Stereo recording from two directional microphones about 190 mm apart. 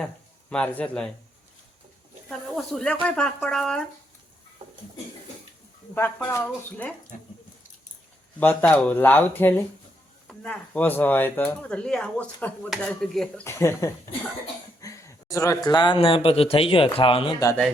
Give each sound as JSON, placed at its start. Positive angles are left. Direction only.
{"t": 0.5, "sound": "speech", "side_deg": 5}
{"t": 2.3, "sound": "speech", "side_deg": 0}
{"t": 5.9, "sound": "speech", "side_deg": 10}
{"t": 7.1, "sound": "speech", "side_deg": 45}
{"t": 8.4, "sound": "speech", "side_deg": 10}